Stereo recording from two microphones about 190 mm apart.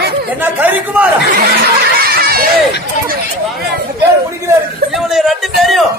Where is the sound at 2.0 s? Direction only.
55° right (ahead or behind).